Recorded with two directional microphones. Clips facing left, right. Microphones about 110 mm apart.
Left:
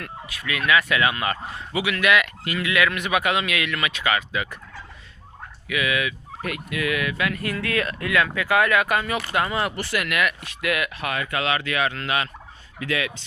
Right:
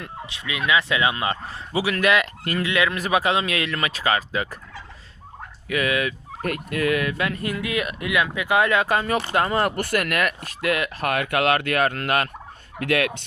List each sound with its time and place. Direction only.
0.0 s speech: 25° right (ahead or behind); by 2.6 s 40° right (ahead or behind)
2.6 s speech: 30° right (ahead or behind)
5.6 s speech: 40° right (ahead or behind)
7.4 s speech: 15° right (ahead or behind); by 10.9 s 35° right (ahead or behind)
11.0 s turkey: 60° right (ahead or behind)